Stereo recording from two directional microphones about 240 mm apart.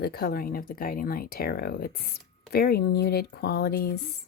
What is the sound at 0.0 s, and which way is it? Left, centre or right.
Speech, left.